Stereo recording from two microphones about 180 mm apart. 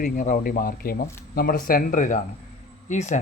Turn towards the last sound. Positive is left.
turn(degrees=40)  # may be behind; listen again after turning